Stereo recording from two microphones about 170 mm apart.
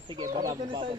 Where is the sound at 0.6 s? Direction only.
30° right (ahead or behind).